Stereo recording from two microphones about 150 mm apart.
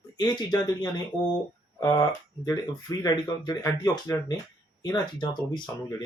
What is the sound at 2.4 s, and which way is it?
Speech, 25° left (ahead or behind).